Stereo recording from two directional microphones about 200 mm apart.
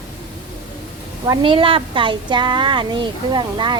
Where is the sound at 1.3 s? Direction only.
25° right (ahead or behind).